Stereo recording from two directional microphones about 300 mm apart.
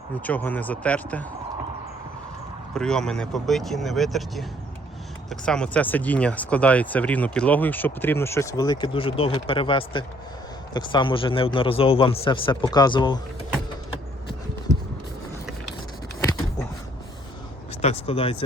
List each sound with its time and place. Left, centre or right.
0.3 s speech: centre
2.7 s a man's voice: centre
17.8 s speech: centre